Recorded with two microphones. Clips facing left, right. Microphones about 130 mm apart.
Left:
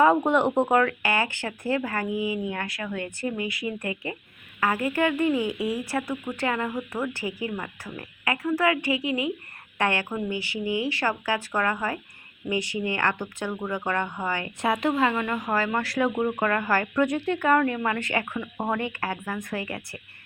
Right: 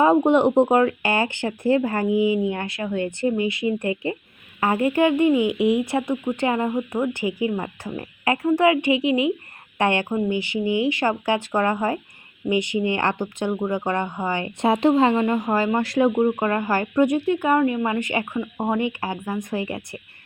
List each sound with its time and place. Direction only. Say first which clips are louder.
0.0 s speech: right 4 dB; 15° right (ahead or behind)